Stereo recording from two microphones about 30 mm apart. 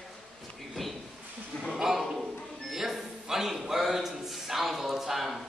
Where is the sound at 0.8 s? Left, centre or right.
Centre.